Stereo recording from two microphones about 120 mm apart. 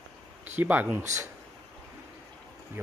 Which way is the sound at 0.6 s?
15° right (ahead or behind).